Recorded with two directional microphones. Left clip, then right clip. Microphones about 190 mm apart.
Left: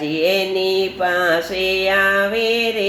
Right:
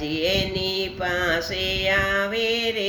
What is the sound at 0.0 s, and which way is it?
Mantra, 15° right (ahead or behind).